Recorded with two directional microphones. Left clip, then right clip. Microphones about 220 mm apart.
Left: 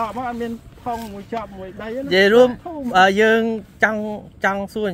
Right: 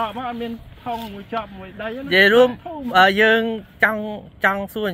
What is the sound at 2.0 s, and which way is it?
Speech, 15° left (ahead or behind).